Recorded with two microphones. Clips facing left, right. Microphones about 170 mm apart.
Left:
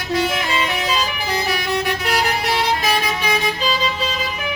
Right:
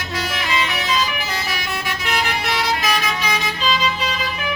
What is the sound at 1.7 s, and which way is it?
Vehicle, 35° left (ahead or behind).